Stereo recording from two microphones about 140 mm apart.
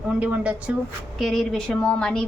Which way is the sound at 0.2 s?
10° right (ahead or behind).